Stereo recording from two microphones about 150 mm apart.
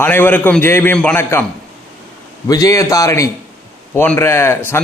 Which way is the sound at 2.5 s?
25° left (ahead or behind).